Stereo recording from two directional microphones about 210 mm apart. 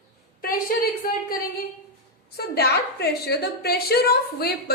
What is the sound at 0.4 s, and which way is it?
A woman's voice, 45° left (ahead or behind).